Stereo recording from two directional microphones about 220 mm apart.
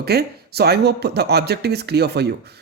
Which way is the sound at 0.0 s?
45° right (ahead or behind).